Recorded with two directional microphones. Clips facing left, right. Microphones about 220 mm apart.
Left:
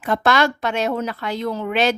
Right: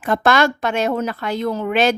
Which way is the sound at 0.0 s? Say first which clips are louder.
Right 2 dB; 50° right (ahead or behind).